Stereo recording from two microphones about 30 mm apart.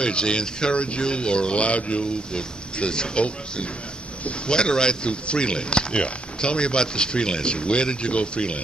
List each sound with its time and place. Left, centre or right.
0.0 s speech: left
4.5 s speech: left